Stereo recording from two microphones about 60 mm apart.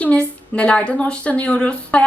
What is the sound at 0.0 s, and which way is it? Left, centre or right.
A woman's voice, left.